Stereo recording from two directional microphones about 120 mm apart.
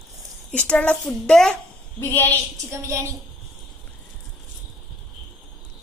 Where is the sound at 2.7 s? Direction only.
25° right (ahead or behind).